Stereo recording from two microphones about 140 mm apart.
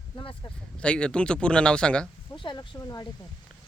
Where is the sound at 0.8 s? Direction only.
5° left (ahead or behind).